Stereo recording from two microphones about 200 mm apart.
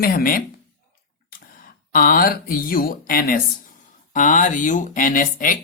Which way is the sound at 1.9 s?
45° left (ahead or behind).